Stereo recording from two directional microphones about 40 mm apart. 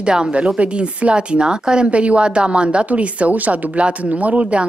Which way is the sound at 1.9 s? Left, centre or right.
Right.